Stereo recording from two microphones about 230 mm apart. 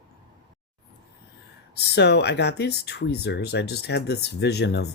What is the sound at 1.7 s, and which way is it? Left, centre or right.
Speech, left.